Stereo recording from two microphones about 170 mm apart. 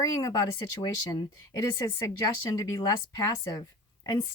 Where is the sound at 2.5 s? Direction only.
20° left (ahead or behind).